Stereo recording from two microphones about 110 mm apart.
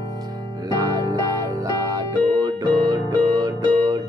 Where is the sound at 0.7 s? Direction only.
30° right (ahead or behind).